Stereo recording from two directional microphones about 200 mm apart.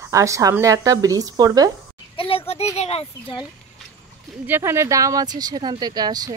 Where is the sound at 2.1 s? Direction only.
30° left (ahead or behind).